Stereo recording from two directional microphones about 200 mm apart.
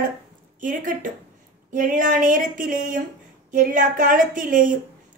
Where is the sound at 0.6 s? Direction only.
40° right (ahead or behind).